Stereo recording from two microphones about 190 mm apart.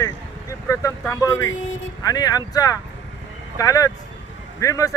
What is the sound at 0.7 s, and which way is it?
Speech, 15° left (ahead or behind).